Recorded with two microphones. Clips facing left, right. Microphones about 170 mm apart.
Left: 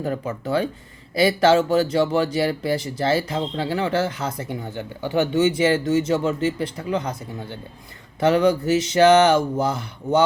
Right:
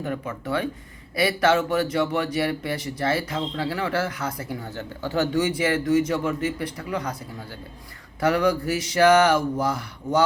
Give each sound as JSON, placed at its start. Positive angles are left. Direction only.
{"t": 0.0, "sound": "speech", "side_deg": 30}